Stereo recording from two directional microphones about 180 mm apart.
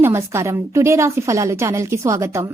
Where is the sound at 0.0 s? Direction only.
15° right (ahead or behind).